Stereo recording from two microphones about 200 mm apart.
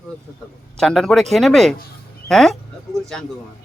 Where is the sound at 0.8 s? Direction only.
5° left (ahead or behind).